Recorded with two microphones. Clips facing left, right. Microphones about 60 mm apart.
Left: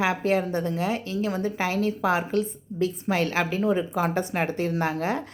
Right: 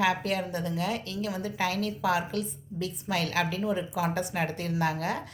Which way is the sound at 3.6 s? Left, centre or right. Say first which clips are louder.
Left 5 dB; left.